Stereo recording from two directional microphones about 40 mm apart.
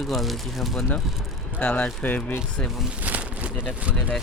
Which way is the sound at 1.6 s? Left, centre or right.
Left.